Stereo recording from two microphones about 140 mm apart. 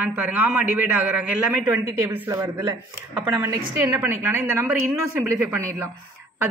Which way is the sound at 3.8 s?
15° right (ahead or behind).